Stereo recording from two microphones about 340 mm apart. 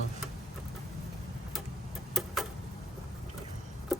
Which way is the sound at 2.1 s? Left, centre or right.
Centre.